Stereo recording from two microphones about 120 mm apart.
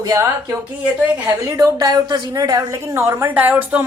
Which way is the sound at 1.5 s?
30° right (ahead or behind).